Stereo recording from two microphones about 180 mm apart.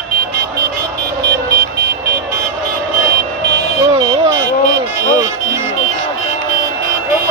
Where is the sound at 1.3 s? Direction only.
65° right (ahead or behind).